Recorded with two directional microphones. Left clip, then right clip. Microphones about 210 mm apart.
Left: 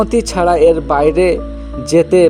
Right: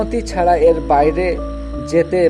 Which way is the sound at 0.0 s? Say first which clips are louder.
Left 3 dB; 35° left (ahead or behind).